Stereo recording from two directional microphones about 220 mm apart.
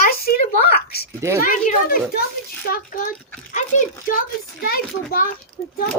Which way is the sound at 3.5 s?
35° left (ahead or behind).